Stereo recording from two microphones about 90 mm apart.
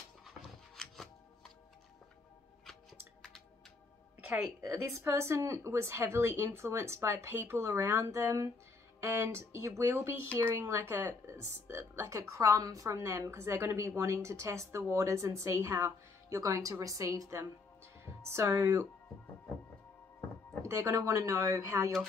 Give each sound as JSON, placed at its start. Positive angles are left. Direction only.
{"t": 2.6, "sound": "music", "side_deg": 5}
{"t": 4.3, "sound": "speech", "side_deg": -30}
{"t": 20.6, "sound": "speech", "side_deg": -30}